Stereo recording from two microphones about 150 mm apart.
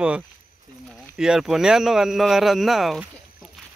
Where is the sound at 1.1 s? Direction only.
5° right (ahead or behind).